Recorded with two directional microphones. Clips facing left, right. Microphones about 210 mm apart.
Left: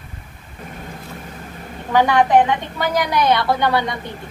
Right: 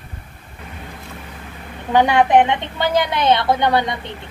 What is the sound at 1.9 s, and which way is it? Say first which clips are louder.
A woman's voice: right 1 dB; 20° right (ahead or behind).